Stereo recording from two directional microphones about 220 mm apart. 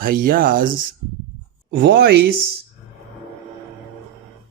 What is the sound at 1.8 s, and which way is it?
Speech, 50° right (ahead or behind).